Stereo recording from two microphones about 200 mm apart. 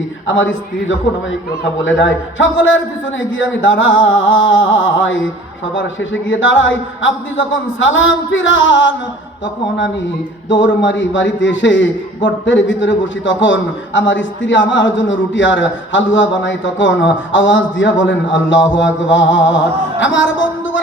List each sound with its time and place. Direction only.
1.8 s a man's voice: 70° left (ahead or behind)
10.5 s a man's voice: 70° left (ahead or behind)